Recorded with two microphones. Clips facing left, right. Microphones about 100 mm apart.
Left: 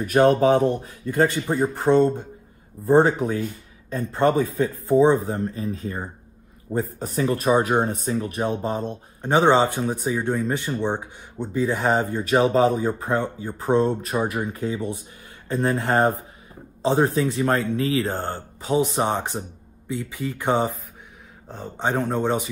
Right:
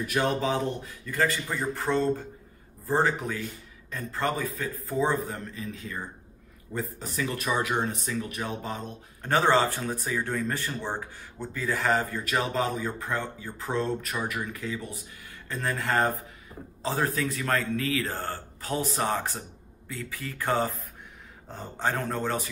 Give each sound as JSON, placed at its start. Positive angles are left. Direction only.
{"t": 0.0, "sound": "speech", "side_deg": 45}
{"t": 1.0, "sound": "a man's voice", "side_deg": 30}